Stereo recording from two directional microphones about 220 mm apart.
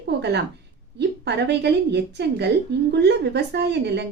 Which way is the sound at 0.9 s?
50° right (ahead or behind).